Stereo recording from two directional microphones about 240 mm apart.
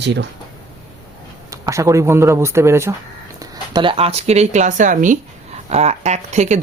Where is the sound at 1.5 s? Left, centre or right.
Centre; by 6.5 s right.